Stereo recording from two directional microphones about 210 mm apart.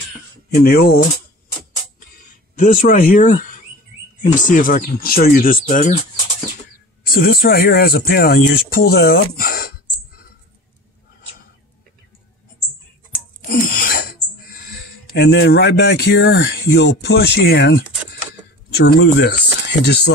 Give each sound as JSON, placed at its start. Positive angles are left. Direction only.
{"t": 0.6, "sound": "speech", "side_deg": 45}
{"t": 2.6, "sound": "speech", "side_deg": 40}
{"t": 7.1, "sound": "speech", "side_deg": 45}
{"t": 13.4, "sound": "sneeze", "side_deg": 40}
{"t": 15.1, "sound": "speech", "side_deg": 50}
{"t": 18.9, "sound": "speech", "side_deg": 55}